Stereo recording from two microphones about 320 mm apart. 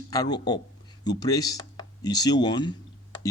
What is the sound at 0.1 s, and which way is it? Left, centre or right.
Speech, centre.